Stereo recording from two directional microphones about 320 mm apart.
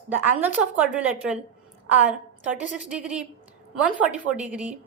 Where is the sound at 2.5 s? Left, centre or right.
Left.